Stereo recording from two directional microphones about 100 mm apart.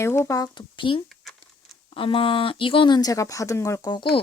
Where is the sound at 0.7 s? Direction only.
60° left (ahead or behind).